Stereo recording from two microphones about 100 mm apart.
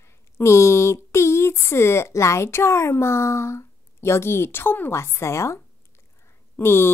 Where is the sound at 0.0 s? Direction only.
25° left (ahead or behind).